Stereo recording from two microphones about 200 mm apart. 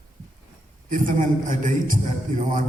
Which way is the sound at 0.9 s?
40° right (ahead or behind).